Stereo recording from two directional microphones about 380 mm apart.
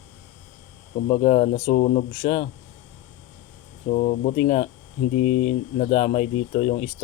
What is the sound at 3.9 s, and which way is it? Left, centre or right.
Speech, centre.